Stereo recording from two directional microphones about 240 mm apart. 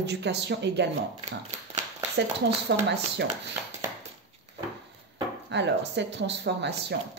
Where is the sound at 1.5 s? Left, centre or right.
Right.